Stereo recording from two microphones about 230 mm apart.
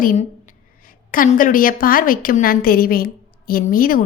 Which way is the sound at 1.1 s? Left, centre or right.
Left.